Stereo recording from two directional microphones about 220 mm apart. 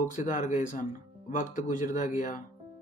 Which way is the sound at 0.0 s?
35° left (ahead or behind).